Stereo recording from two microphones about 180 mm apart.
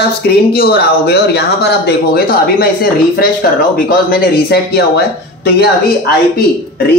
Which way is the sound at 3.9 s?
55° left (ahead or behind).